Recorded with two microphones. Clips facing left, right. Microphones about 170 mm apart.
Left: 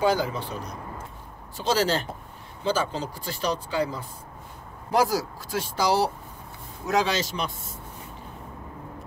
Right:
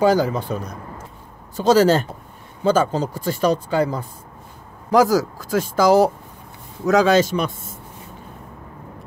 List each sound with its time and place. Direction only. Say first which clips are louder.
0.0 s speech: right 7 dB; 45° right (ahead or behind)
1.6 s speech: right 10 dB; 45° right (ahead or behind)